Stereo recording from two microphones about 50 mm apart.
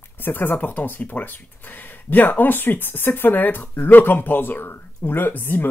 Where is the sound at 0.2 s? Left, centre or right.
Left.